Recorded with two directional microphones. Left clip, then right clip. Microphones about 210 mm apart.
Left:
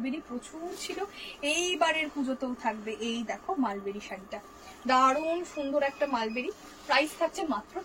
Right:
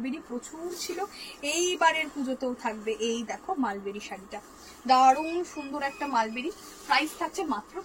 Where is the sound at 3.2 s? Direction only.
10° left (ahead or behind).